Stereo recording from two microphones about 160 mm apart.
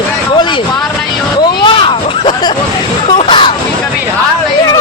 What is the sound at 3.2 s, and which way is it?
Hubbub, 30° left (ahead or behind).